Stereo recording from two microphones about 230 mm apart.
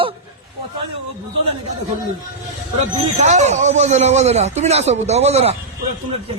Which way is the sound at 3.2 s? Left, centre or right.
Right.